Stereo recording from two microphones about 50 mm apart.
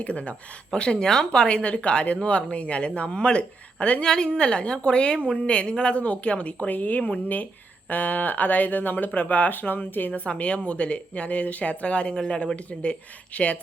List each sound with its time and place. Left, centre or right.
0.0 s a woman's voice: left
4.0 s a woman's voice: centre; by 10.1 s left
10.2 s a woman's voice: left